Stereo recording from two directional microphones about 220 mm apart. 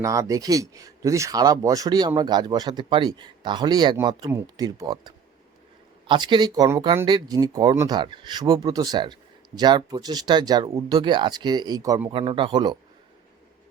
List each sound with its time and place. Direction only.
0.0 s speech: 15° right (ahead or behind)
12.1 s speech: 25° right (ahead or behind)